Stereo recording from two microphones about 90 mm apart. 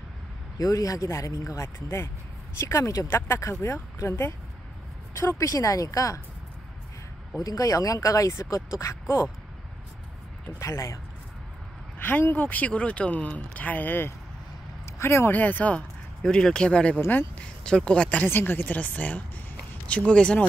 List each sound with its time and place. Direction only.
0.6 s speech: 40° left (ahead or behind)
5.4 s speech: 40° left (ahead or behind)
7.4 s speech: 40° left (ahead or behind)
10.6 s speech: 35° left (ahead or behind)
12.0 s speech: 20° left (ahead or behind)
16.2 s speech: 5° left (ahead or behind)